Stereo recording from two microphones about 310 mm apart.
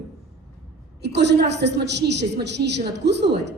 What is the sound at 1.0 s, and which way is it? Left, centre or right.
A woman's voice, right.